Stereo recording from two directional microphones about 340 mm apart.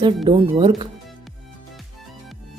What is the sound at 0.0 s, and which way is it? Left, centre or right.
Speech, centre.